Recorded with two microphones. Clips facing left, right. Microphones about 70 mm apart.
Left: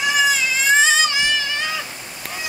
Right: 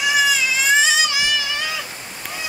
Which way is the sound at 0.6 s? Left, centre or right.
Left.